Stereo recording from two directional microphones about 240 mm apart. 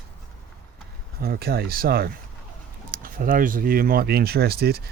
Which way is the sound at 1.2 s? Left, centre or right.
Right.